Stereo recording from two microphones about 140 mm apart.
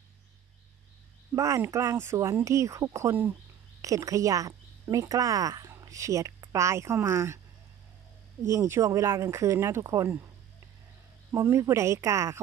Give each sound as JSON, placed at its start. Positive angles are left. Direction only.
{"t": 1.3, "sound": "speech", "side_deg": -20}
{"t": 8.5, "sound": "speech", "side_deg": -20}
{"t": 11.3, "sound": "speech", "side_deg": -20}